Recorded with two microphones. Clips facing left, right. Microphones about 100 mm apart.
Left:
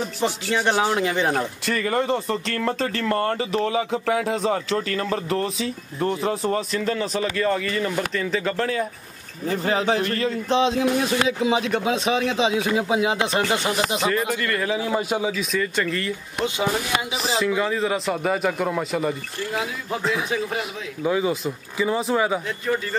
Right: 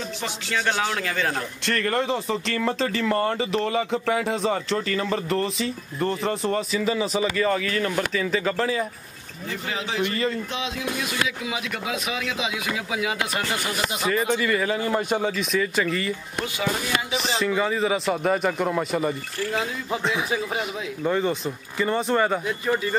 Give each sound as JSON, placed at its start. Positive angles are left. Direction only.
{"t": 0.2, "sound": "speech", "side_deg": 20}
{"t": 1.7, "sound": "speech", "side_deg": 5}
{"t": 9.5, "sound": "speech", "side_deg": 40}
{"t": 10.0, "sound": "speech", "side_deg": 0}
{"t": 10.5, "sound": "speech", "side_deg": 35}
{"t": 14.0, "sound": "speech", "side_deg": 0}